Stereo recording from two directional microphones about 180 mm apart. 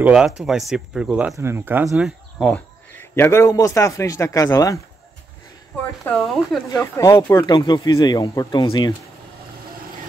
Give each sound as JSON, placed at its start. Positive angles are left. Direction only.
{"t": 0.0, "sound": "speech", "side_deg": -5}
{"t": 6.0, "sound": "speech", "side_deg": 0}
{"t": 6.7, "sound": "speech", "side_deg": 20}